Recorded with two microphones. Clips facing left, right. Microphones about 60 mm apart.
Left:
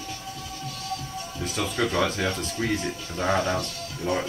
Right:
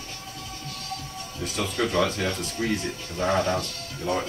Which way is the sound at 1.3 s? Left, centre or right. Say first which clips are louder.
Even; left.